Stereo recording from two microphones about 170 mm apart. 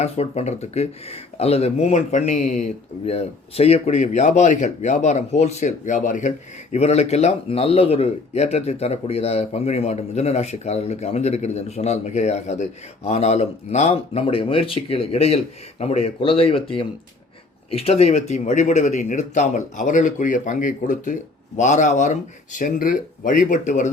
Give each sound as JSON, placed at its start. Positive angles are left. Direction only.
{"t": 0.0, "sound": "speech", "side_deg": 40}